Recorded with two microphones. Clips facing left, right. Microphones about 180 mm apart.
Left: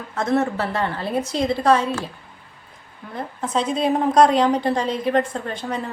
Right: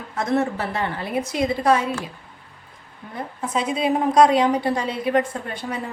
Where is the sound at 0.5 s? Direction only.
15° right (ahead or behind).